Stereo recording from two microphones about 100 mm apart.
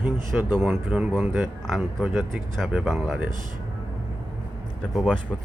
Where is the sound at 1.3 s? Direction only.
Centre (ahead or behind).